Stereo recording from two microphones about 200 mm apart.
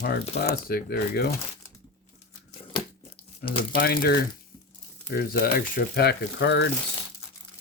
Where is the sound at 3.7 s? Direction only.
50° left (ahead or behind).